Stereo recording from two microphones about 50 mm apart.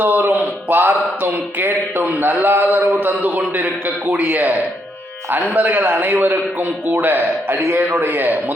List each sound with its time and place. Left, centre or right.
0.0 s a man's voice: right